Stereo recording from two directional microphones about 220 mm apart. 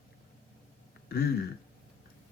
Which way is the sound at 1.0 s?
45° left (ahead or behind).